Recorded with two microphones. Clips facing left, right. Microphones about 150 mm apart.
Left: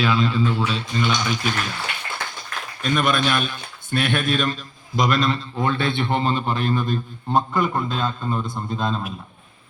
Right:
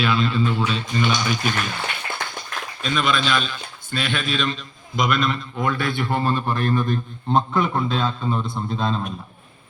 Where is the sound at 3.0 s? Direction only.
55° left (ahead or behind).